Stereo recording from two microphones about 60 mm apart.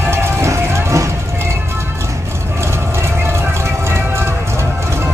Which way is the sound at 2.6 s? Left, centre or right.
Right.